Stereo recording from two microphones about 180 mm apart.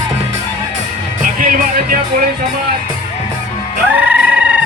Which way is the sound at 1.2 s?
50° right (ahead or behind).